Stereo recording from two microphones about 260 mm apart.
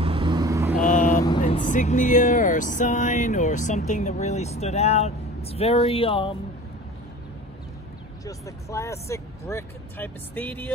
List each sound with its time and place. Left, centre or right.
0.0 s vehicle: centre
0.7 s vehicle: left
1.4 s speech: left
8.3 s speech: centre